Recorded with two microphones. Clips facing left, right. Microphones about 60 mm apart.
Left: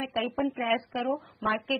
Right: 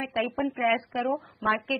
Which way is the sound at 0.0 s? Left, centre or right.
Right.